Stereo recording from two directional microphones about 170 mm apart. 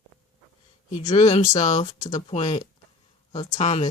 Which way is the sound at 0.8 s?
45° left (ahead or behind).